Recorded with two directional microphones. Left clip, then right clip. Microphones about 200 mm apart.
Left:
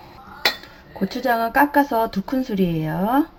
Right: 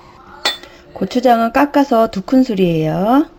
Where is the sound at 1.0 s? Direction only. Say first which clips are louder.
Right 8 dB; 35° right (ahead or behind).